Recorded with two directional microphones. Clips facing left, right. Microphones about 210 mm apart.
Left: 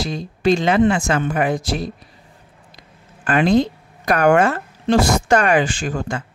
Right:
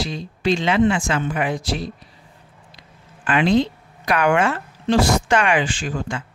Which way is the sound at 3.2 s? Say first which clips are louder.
Left 2 dB; 45° left (ahead or behind).